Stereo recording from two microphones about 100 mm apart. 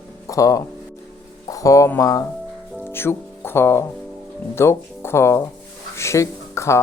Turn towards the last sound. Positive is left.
turn(degrees=30)  # may be behind; listen again after turning